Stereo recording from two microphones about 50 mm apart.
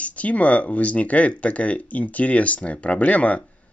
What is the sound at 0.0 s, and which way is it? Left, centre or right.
Speech, left.